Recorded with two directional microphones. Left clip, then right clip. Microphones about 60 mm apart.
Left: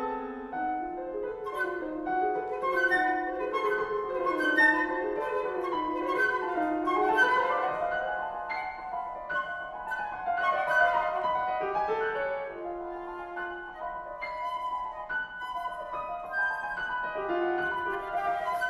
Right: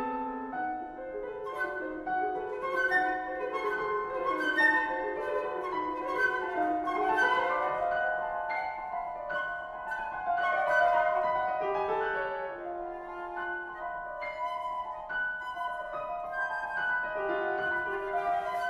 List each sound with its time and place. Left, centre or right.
2.0 s music: right
10.2 s music: right
17.2 s music: right